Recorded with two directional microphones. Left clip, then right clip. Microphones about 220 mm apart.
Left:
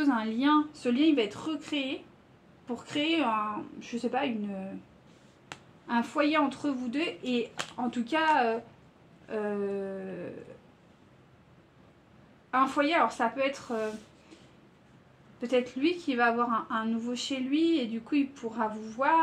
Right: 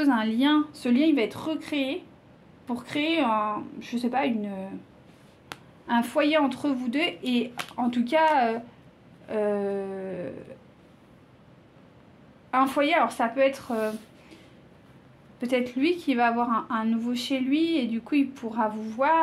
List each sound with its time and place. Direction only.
0.0 s a woman's voice: 40° right (ahead or behind)
5.5 s a sound: 15° right (ahead or behind)
5.9 s a woman's voice: 40° right (ahead or behind)
12.4 s a woman's voice: 40° right (ahead or behind)
15.4 s a woman's voice: 40° right (ahead or behind)